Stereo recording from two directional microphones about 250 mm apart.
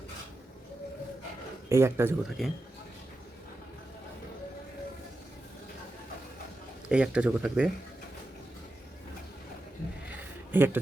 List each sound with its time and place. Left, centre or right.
1.7 s speech: centre
6.8 s speech: centre
10.1 s a sound: centre